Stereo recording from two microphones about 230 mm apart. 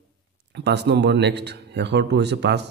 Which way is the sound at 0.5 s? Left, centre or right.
Right.